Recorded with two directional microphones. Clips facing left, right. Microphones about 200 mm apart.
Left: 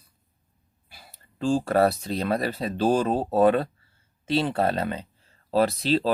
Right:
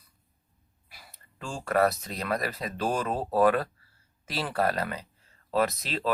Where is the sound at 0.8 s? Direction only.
30° left (ahead or behind).